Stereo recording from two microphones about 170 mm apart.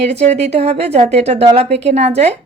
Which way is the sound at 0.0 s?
40° right (ahead or behind).